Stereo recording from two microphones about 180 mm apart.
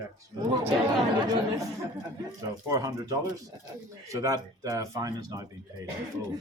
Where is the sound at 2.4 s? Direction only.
20° right (ahead or behind).